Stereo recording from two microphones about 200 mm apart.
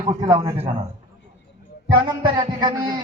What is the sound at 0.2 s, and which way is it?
Speech, 20° right (ahead or behind).